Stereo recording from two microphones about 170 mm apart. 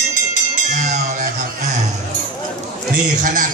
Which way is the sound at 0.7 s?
45° right (ahead or behind).